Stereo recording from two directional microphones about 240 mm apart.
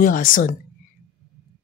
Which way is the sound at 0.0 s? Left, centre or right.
Left.